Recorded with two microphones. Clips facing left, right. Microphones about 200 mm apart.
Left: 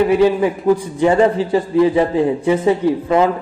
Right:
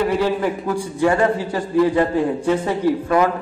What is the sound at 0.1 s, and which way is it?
A man's voice, 15° left (ahead or behind).